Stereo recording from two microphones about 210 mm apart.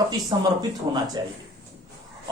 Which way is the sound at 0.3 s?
20° right (ahead or behind).